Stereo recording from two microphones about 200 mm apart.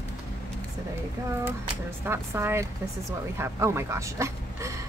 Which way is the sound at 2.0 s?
10° right (ahead or behind).